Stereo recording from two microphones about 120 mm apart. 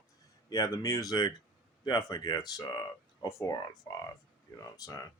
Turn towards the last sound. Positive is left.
turn(degrees=30)  # may be behind; listen again after turning